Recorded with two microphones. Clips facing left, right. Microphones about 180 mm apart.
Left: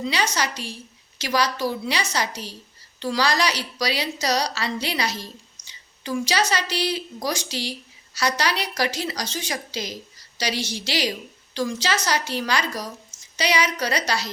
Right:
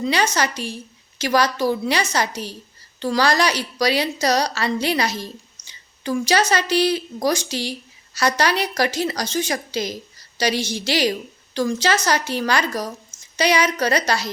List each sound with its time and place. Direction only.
0.0 s a woman's voice: 50° right (ahead or behind)